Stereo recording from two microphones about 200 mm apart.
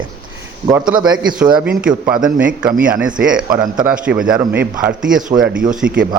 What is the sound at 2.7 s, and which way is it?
Speech, 45° right (ahead or behind).